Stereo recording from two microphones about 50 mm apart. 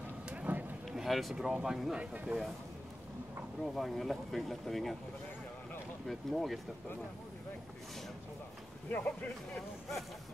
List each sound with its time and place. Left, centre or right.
0.3 s a sound: right
0.9 s a sound: centre
1.4 s speech: centre
2.0 s speech: right
3.6 s speech: centre
6.0 s speech: centre
8.8 s speech: left